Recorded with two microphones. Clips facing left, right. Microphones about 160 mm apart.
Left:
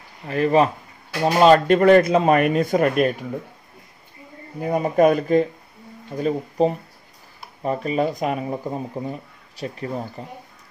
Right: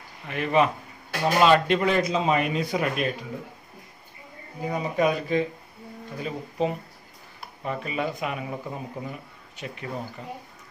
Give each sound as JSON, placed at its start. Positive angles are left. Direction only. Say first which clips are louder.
{"t": 0.3, "sound": "a man's voice", "louder": "left 5 dB", "side_deg": 35}
{"t": 4.6, "sound": "a man's voice", "louder": "left 7 dB", "side_deg": 50}